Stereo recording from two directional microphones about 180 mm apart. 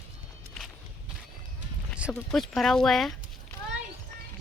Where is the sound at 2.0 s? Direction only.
Centre (ahead or behind).